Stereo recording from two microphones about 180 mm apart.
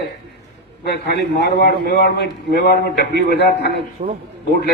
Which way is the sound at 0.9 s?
65° left (ahead or behind).